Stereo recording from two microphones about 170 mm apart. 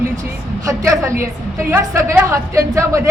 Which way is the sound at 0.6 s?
20° right (ahead or behind).